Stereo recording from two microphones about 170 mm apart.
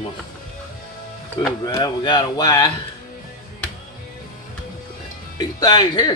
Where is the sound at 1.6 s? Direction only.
25° left (ahead or behind).